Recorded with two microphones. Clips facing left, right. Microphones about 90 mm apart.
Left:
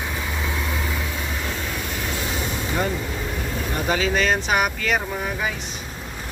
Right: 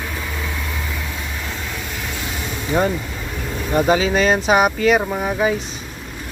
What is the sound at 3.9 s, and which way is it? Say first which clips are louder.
Speech: right 4 dB; 25° right (ahead or behind).